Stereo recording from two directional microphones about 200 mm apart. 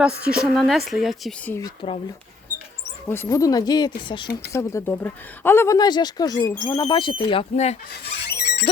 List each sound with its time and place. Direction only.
0.3 s a woman's voice: centre (ahead or behind)
1.5 s speech: 20° left (ahead or behind)
3.1 s speech: 15° left (ahead or behind)
4.5 s speech: 10° left (ahead or behind); by 7.8 s 35° left (ahead or behind)
8.0 s a sound: 55° left (ahead or behind)